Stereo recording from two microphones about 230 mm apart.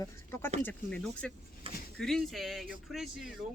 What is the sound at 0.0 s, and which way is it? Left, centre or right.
Speech, centre.